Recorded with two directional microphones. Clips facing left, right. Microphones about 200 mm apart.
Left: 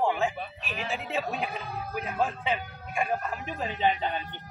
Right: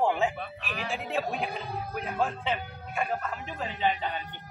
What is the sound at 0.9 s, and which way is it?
A man's voice, centre (ahead or behind).